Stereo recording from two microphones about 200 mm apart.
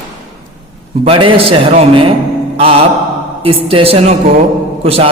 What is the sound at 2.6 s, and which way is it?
A man's voice, 30° right (ahead or behind).